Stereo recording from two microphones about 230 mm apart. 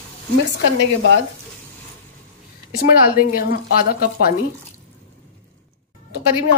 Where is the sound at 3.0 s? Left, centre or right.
Left.